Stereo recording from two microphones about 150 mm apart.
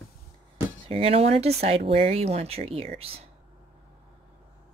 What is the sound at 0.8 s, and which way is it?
Speech, 40° right (ahead or behind).